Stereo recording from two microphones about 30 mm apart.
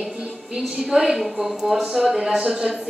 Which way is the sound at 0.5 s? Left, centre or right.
Right.